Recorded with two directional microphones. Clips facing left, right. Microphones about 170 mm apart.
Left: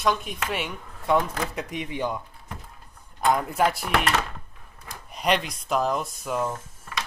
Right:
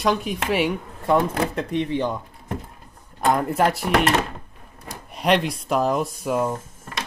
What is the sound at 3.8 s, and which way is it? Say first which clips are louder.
Speech: right 5 dB; 35° right (ahead or behind).